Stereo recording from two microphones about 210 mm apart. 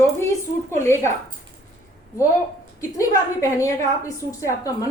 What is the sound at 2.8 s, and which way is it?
A woman's voice, 15° left (ahead or behind).